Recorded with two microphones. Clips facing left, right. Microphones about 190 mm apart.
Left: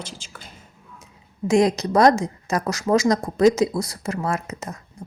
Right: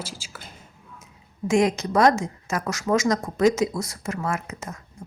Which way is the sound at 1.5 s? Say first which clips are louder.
Left 3 dB; 35° left (ahead or behind).